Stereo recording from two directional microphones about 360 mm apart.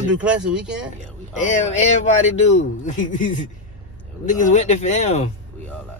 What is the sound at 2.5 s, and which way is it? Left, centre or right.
Mantra, centre.